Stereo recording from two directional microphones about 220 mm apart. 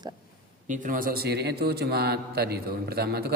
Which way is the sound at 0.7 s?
35° right (ahead or behind).